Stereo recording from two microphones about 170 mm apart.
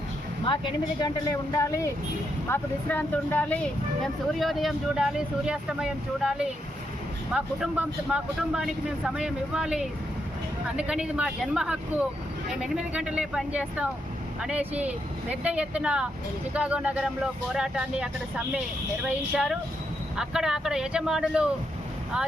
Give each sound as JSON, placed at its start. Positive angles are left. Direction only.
{"t": 0.4, "sound": "speech", "side_deg": 30}